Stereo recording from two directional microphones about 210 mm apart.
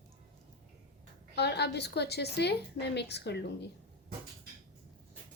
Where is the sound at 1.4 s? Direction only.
50° left (ahead or behind).